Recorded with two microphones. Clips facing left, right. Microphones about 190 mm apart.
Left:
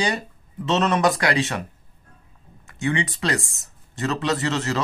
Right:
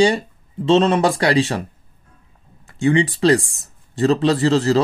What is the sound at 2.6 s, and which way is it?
A man's voice, 30° right (ahead or behind).